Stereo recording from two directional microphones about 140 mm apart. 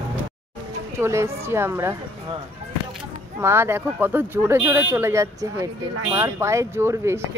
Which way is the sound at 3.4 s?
15° right (ahead or behind).